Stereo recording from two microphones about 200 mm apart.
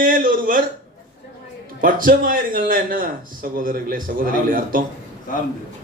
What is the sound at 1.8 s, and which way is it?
A man's voice, 45° right (ahead or behind).